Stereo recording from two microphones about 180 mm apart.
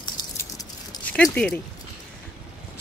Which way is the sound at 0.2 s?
25° left (ahead or behind).